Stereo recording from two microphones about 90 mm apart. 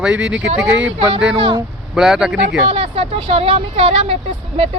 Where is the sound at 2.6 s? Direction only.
90° right.